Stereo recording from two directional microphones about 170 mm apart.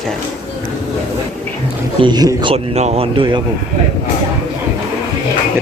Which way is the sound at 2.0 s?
25° right (ahead or behind).